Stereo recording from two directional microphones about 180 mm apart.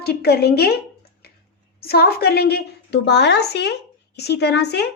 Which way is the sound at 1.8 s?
60° left (ahead or behind).